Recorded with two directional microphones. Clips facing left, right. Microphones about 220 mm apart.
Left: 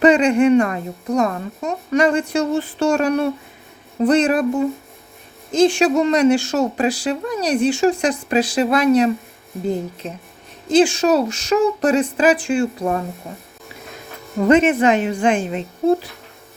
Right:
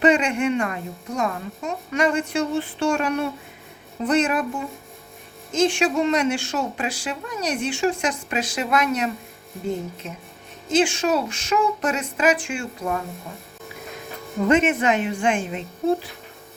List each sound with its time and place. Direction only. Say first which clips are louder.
0.0 s speech: left 6 dB; 35° left (ahead or behind)
5.5 s speech: left 6 dB; 35° left (ahead or behind)
14.4 s speech: left 5 dB; 35° left (ahead or behind)